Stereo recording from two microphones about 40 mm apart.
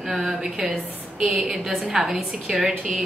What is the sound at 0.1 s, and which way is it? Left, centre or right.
A woman's voice, centre.